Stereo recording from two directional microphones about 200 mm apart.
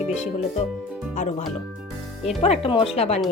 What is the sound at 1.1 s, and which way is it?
Speech, 35° left (ahead or behind).